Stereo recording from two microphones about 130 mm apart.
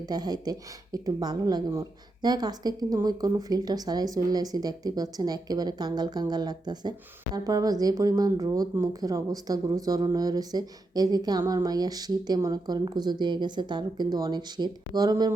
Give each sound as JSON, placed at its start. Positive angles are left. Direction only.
{"t": 0.0, "sound": "speech", "side_deg": -30}